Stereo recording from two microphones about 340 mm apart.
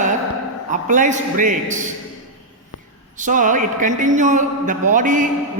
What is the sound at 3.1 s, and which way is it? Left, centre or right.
A man's voice, right.